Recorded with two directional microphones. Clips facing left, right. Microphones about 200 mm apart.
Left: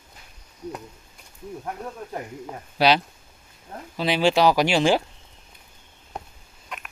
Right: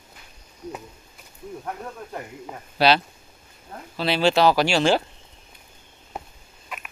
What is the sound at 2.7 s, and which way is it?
Speech, 15° left (ahead or behind).